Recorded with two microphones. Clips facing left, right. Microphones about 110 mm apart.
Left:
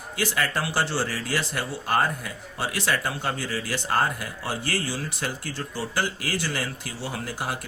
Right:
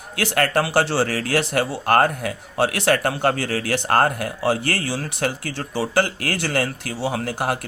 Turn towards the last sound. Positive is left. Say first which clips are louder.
# right 7 dB
turn(degrees=-60)  # may be behind; listen again after turning